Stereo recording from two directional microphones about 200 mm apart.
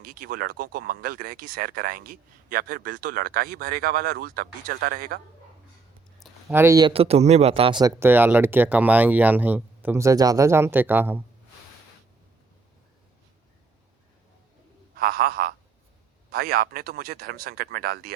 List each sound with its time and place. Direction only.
0.0 s speech: 45° right (ahead or behind)
6.5 s speech: 15° right (ahead or behind)
14.9 s a sound: 50° right (ahead or behind)
16.3 s speech: 50° right (ahead or behind)